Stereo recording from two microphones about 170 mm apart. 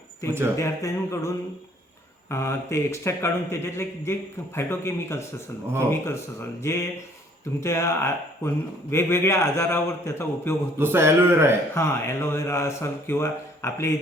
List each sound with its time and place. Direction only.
0.2 s a man's voice: 15° left (ahead or behind)
2.3 s a man's voice: 15° left (ahead or behind)
6.6 s a man's voice: 15° left (ahead or behind)
10.8 s a man's voice: 15° right (ahead or behind)
11.7 s a man's voice: 15° left (ahead or behind)